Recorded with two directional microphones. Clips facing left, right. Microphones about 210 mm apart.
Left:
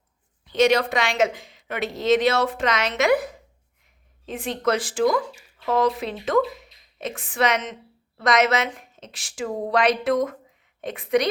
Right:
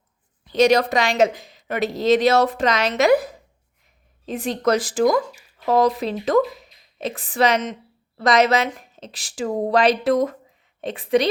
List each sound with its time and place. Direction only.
0.4 s speech: 40° right (ahead or behind)
4.3 s a woman's voice: 40° right (ahead or behind)